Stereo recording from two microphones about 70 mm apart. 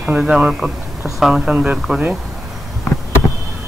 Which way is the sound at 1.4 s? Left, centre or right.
Centre.